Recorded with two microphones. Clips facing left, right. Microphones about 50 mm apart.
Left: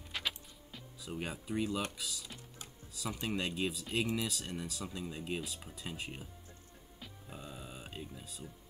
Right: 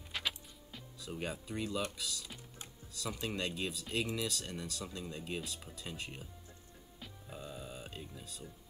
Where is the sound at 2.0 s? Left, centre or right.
Centre.